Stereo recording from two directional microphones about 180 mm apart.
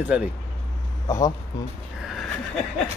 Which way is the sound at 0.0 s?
5° right (ahead or behind).